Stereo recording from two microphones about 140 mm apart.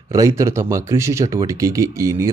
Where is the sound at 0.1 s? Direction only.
25° right (ahead or behind).